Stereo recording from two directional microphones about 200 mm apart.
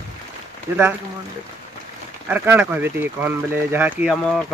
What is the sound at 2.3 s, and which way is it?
Speech, 10° right (ahead or behind).